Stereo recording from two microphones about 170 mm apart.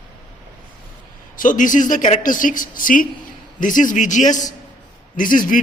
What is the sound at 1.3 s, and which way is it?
A woman's voice, 50° left (ahead or behind).